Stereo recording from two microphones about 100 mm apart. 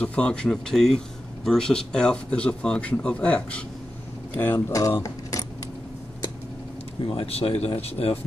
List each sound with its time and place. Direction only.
0.0 s speech: 10° left (ahead or behind)
4.6 s speech: 35° left (ahead or behind)
7.1 s speech: 70° left (ahead or behind)